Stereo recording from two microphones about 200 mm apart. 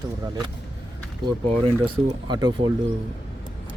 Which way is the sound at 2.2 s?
20° right (ahead or behind).